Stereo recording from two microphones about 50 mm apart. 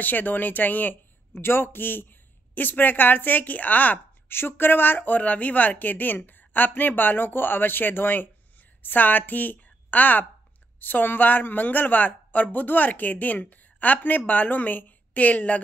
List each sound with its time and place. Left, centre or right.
0.0 s speech: left
4.3 s a woman's voice: left